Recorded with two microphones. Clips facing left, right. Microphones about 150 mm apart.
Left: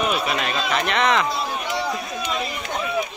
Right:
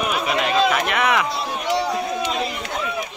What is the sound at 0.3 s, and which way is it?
Speech, 15° right (ahead or behind).